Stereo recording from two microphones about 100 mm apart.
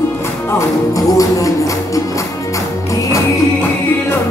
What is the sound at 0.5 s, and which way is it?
Music, 30° left (ahead or behind).